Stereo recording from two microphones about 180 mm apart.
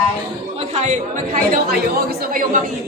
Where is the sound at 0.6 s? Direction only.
40° right (ahead or behind).